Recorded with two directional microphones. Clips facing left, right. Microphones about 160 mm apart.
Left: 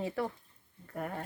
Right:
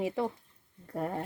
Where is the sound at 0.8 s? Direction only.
30° right (ahead or behind).